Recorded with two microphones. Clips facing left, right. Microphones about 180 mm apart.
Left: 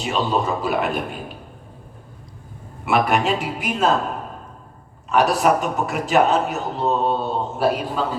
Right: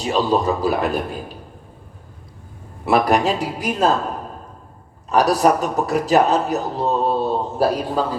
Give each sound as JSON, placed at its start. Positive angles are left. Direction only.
{"t": 0.0, "sound": "a man's voice", "side_deg": -35}
{"t": 2.8, "sound": "a man's voice", "side_deg": -35}
{"t": 5.0, "sound": "a man's voice", "side_deg": -35}